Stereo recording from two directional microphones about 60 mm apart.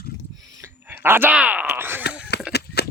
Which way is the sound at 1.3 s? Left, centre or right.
Right.